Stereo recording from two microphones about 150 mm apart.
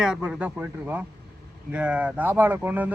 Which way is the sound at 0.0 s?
5° right (ahead or behind).